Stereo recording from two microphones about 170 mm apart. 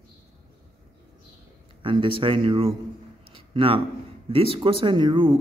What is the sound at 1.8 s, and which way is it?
Speech, 30° right (ahead or behind).